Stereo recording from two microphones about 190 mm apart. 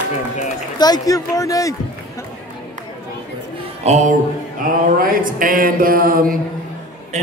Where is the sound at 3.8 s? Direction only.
40° right (ahead or behind).